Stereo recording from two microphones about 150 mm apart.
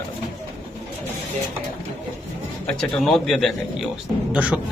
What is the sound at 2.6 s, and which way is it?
Speech, centre (ahead or behind).